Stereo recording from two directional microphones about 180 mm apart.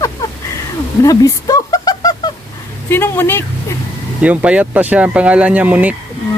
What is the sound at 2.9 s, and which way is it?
Speech, 10° left (ahead or behind).